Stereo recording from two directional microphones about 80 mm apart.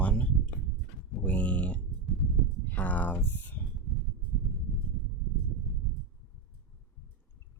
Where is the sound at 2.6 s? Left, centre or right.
Left.